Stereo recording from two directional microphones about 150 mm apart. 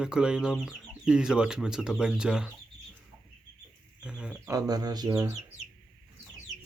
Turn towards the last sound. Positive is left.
turn(degrees=-20)  # may be behind; listen again after turning